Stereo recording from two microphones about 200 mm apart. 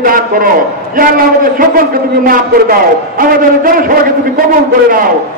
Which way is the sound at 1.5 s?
45° right (ahead or behind).